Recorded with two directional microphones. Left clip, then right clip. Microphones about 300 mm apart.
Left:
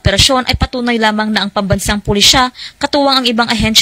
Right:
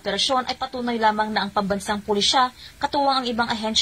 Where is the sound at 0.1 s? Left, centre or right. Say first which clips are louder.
Left 11 dB; left.